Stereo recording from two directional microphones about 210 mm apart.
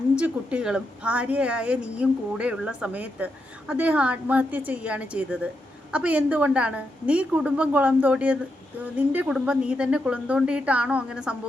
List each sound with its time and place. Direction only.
0.2 s a woman's voice: 5° right (ahead or behind)